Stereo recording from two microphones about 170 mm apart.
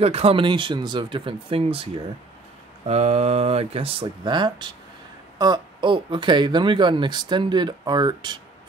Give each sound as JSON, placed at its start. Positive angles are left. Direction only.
{"t": 0.0, "sound": "speech", "side_deg": -35}
{"t": 2.9, "sound": "speech", "side_deg": -40}